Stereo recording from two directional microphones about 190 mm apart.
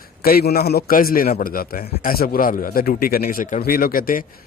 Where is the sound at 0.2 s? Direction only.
55° left (ahead or behind).